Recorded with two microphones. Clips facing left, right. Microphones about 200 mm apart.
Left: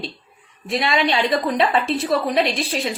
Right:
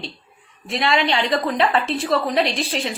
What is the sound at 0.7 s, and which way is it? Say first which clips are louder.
A woman's voice: even; 15° left (ahead or behind).